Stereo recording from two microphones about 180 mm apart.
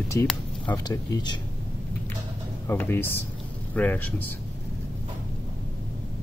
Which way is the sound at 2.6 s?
10° left (ahead or behind).